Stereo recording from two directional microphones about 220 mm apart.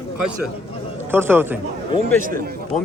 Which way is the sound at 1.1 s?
10° right (ahead or behind).